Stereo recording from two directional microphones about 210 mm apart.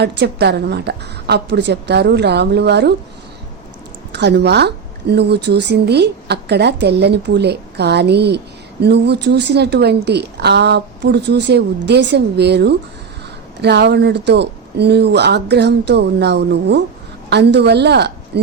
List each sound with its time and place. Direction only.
0.0 s speech: 50° right (ahead or behind)
4.1 s speech: 55° right (ahead or behind)